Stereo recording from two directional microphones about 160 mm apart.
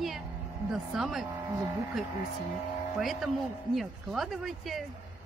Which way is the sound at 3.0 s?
Centre (ahead or behind).